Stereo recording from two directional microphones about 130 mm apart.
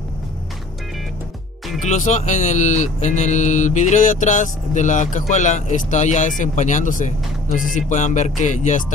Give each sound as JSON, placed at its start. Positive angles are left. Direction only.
{"t": 1.8, "sound": "speech", "side_deg": 65}